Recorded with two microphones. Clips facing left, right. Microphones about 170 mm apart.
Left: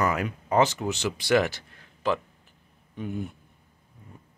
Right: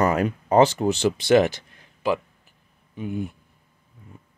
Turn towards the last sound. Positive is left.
turn(degrees=-5)  # may be behind; listen again after turning